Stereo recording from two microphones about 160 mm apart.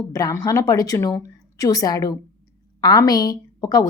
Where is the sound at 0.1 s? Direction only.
20° left (ahead or behind).